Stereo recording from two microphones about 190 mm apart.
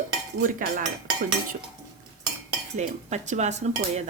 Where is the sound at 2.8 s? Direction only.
35° right (ahead or behind).